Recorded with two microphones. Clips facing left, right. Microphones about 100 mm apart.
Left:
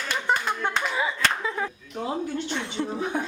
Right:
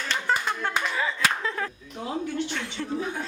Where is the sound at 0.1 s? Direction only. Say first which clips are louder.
Left 1 dB; 15° left (ahead or behind).